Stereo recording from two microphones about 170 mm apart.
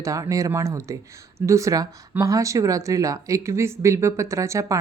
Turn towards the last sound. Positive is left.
turn(degrees=-15)  # may be behind; listen again after turning